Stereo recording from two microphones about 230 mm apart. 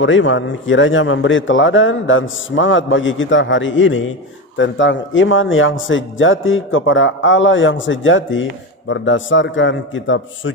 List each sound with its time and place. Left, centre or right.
0.0 s a man's voice: left